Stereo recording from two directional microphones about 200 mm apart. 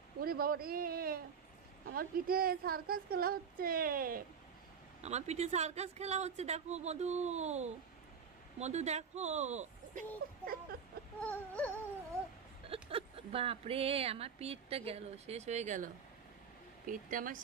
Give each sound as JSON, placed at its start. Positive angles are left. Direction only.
{"t": 0.2, "sound": "a woman's voice", "side_deg": -50}
{"t": 5.0, "sound": "speech", "side_deg": -35}
{"t": 10.4, "sound": "a woman's voice", "side_deg": -50}
{"t": 11.1, "sound": "a sound", "side_deg": 5}
{"t": 12.6, "sound": "a woman's voice", "side_deg": -30}